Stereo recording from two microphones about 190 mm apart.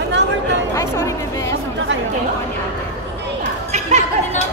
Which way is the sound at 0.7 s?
15° left (ahead or behind).